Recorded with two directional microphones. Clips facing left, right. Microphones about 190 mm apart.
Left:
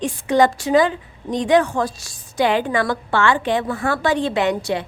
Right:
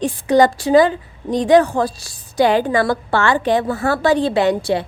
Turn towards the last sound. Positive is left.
turn(degrees=-35)  # may be behind; listen again after turning